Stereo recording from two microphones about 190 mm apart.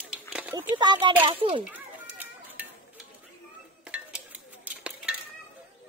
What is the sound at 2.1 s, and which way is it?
Stir, 10° right (ahead or behind).